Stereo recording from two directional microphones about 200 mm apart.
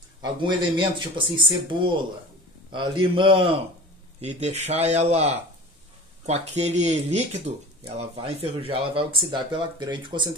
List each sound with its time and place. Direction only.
0.2 s speech: 25° right (ahead or behind)